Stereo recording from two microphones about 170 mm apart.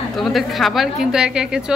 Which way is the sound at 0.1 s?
Centre (ahead or behind).